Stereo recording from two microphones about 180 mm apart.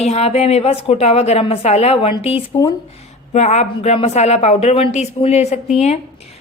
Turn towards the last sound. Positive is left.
turn(degrees=35)  # may be behind; listen again after turning